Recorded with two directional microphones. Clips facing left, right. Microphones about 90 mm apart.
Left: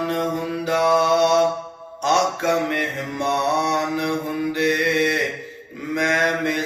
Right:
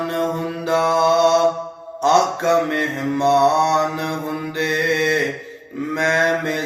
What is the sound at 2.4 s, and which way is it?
Mantra, 30° right (ahead or behind).